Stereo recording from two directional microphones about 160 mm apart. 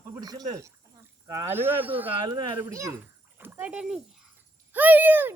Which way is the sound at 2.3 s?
25° right (ahead or behind).